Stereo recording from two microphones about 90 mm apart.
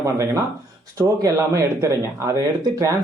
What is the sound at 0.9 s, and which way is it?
Speech, 40° right (ahead or behind).